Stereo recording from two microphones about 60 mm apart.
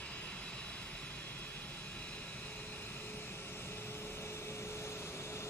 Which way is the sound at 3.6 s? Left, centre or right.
Left.